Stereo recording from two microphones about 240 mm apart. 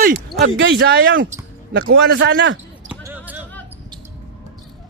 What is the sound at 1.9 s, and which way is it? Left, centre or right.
Speech, right.